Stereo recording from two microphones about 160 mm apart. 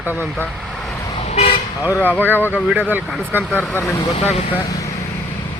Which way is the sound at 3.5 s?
10° left (ahead or behind).